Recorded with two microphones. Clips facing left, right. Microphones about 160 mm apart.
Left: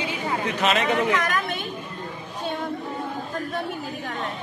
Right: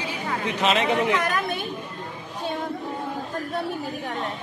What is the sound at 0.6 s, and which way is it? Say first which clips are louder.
Speech: right 1 dB; 25° right (ahead or behind).